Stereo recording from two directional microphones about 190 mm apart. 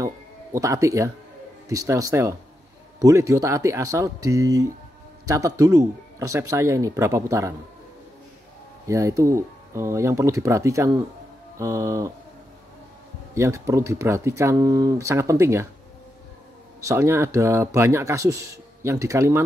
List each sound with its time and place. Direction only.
0.0 s speech: 15° right (ahead or behind)
8.8 s speech: 15° right (ahead or behind)
13.3 s speech: 15° right (ahead or behind)
16.8 s speech: 15° right (ahead or behind)